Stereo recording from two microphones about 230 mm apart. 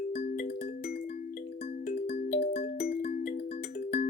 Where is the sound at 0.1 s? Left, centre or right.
Left.